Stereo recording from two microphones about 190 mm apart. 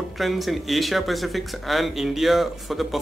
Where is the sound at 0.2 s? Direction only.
Centre (ahead or behind).